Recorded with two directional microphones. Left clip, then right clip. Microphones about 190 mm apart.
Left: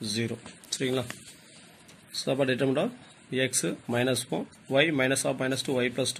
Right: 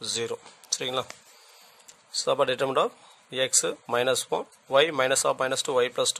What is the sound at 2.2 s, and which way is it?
Speech, 55° right (ahead or behind).